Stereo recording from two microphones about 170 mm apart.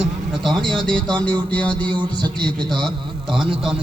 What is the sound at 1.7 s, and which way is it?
Music, 25° right (ahead or behind).